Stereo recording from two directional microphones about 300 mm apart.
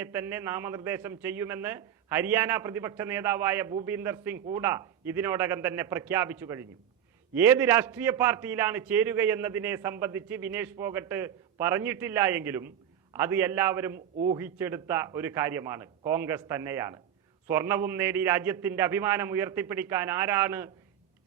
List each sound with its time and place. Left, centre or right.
0.0 s a man's voice: centre